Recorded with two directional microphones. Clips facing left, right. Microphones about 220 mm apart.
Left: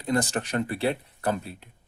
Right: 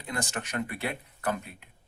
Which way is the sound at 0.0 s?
35° left (ahead or behind).